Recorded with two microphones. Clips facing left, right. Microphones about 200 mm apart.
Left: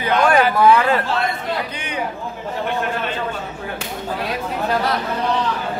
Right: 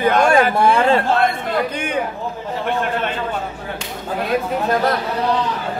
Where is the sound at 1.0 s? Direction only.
50° right (ahead or behind).